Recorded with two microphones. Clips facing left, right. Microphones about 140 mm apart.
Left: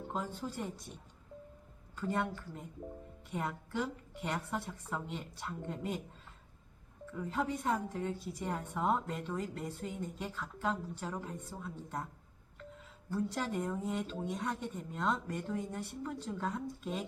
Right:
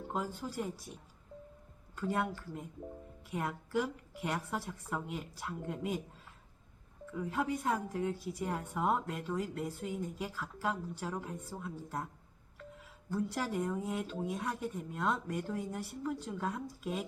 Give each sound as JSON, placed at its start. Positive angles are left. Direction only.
{"t": 0.1, "sound": "a woman's voice", "side_deg": -5}
{"t": 2.0, "sound": "a woman's voice", "side_deg": -5}
{"t": 7.1, "sound": "a woman's voice", "side_deg": -5}
{"t": 13.1, "sound": "a woman's voice", "side_deg": -5}